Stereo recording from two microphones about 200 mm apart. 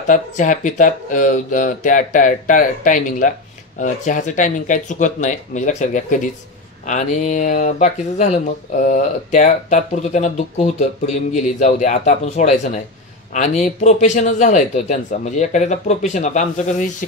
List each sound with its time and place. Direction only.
0.0 s speech: 40° left (ahead or behind)